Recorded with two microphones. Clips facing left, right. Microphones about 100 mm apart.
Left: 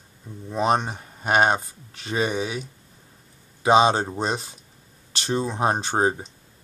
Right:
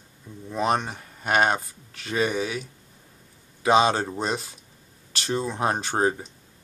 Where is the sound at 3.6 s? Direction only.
25° left (ahead or behind).